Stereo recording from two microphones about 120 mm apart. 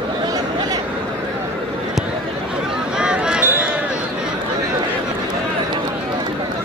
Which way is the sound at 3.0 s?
5° right (ahead or behind).